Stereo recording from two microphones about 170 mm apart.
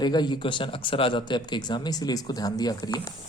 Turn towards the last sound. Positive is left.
turn(degrees=25)  # may be behind; listen again after turning